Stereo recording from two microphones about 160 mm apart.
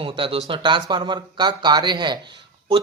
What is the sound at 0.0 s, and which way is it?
A man's voice, 35° right (ahead or behind).